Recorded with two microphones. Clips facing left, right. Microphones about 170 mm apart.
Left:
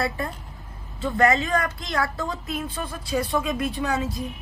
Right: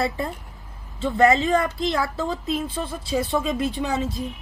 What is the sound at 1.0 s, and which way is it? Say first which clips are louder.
Speech: right 3 dB; 25° right (ahead or behind).